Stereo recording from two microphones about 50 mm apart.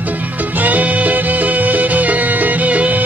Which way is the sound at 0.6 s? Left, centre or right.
Right.